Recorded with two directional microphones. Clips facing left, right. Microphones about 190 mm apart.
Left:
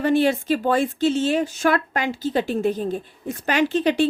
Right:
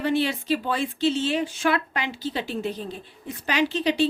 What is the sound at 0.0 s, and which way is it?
A woman's voice, 45° left (ahead or behind).